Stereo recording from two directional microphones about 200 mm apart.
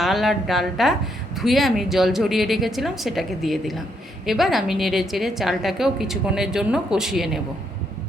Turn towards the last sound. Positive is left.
turn(degrees=0)  # may be behind; listen again after turning